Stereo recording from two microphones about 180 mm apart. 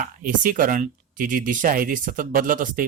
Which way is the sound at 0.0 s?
50° right (ahead or behind).